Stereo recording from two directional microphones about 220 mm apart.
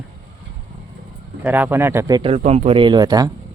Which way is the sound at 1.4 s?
10° right (ahead or behind).